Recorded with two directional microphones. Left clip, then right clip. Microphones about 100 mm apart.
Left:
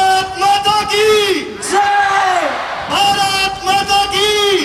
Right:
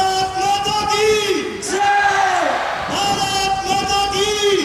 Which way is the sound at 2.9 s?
25° left (ahead or behind).